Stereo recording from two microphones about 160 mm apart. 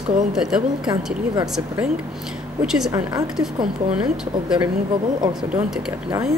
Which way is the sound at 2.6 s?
5° right (ahead or behind).